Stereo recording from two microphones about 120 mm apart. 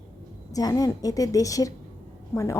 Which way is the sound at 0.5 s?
30° left (ahead or behind).